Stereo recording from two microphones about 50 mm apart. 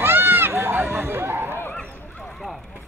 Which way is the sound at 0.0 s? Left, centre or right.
Right.